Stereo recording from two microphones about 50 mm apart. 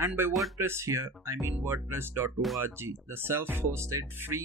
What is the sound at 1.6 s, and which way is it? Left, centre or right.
Speech, right.